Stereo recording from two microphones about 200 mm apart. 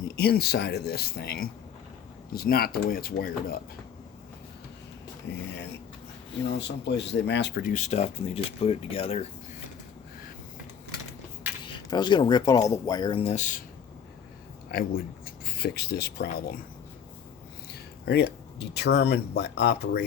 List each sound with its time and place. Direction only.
0.2 s speech: 50° left (ahead or behind)
5.3 s speech: 60° left (ahead or behind)
6.6 s speech: 60° left (ahead or behind)
7.7 s speech: 35° left (ahead or behind)
11.6 s speech: 20° left (ahead or behind)
14.7 s speech: 45° left (ahead or behind)
18.0 s speech: 55° left (ahead or behind)